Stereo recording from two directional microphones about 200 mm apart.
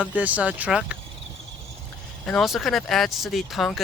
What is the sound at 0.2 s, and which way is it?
Speech, 5° right (ahead or behind).